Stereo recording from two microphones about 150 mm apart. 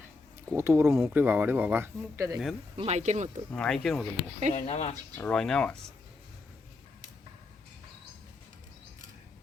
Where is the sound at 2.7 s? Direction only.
45° right (ahead or behind).